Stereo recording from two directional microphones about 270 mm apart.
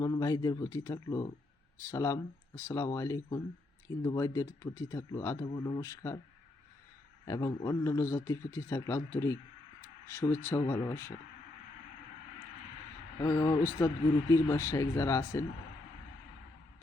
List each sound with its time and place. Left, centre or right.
0.0 s speech: centre
7.3 s speech: centre
13.2 s speech: centre